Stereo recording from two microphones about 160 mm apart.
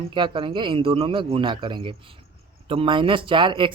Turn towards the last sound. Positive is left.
turn(degrees=-30)  # may be behind; listen again after turning